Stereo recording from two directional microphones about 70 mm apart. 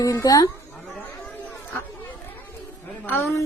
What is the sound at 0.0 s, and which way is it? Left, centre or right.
Speech, left.